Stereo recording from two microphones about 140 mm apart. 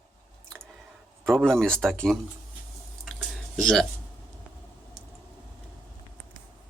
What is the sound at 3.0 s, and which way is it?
Drip, centre (ahead or behind).